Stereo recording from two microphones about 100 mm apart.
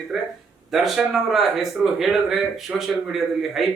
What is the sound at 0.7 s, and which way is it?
Speech, centre (ahead or behind).